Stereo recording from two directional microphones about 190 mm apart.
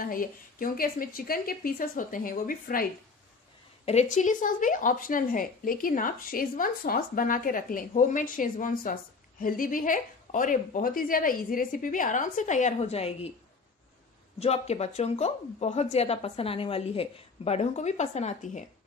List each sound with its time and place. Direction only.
0.0 s speech: 45° left (ahead or behind)
3.8 s speech: 35° left (ahead or behind)
14.4 s a woman's voice: 35° left (ahead or behind)